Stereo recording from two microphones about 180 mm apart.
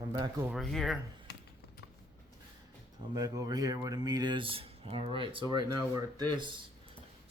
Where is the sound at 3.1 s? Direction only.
20° right (ahead or behind).